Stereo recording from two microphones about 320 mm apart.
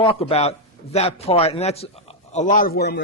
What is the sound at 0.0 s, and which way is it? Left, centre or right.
A man's voice, centre.